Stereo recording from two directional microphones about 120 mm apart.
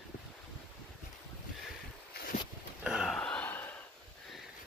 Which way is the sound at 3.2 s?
10° left (ahead or behind).